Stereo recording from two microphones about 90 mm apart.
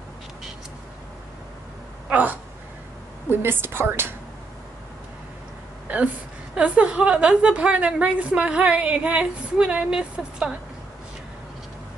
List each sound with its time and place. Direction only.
2.0 s a woman's voice: 15° right (ahead or behind)
6.5 s a woman's voice: 15° right (ahead or behind)